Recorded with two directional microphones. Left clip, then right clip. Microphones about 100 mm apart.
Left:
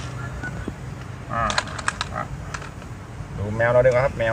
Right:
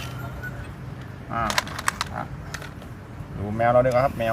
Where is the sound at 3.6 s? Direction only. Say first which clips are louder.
Left 2 dB; 55° left (ahead or behind).